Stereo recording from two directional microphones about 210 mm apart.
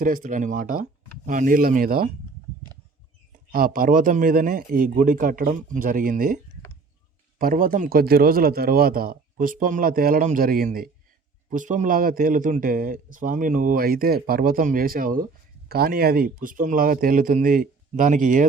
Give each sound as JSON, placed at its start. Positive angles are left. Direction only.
{"t": 0.0, "sound": "a man's voice", "side_deg": -40}
{"t": 3.5, "sound": "a man's voice", "side_deg": -40}